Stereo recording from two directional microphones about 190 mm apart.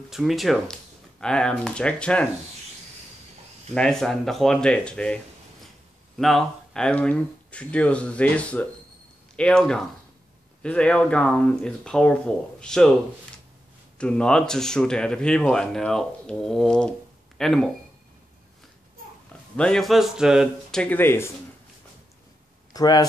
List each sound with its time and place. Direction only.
0.1 s speech: centre (ahead or behind)
3.7 s speech: 5° left (ahead or behind)
13.9 s speech: 5° left (ahead or behind)
19.5 s speech: 5° left (ahead or behind)
22.7 s speech: 20° left (ahead or behind)